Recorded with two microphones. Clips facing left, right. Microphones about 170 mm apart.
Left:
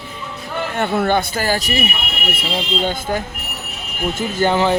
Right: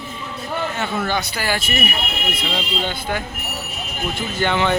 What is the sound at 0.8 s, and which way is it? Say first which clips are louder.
A man's voice: left 9 dB; 55° left (ahead or behind).